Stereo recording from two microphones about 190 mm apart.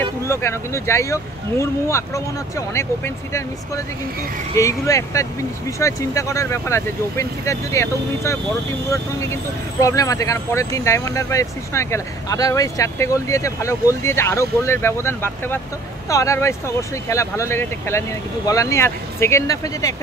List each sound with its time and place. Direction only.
0.2 s speech: 15° left (ahead or behind)
4.6 s speech: 15° left (ahead or behind)